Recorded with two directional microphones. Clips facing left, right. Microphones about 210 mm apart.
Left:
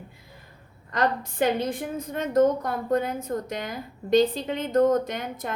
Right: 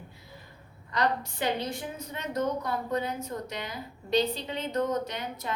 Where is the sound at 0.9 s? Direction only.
50° left (ahead or behind).